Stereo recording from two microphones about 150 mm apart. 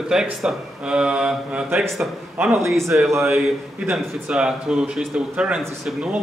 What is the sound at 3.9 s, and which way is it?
Speech, 5° right (ahead or behind).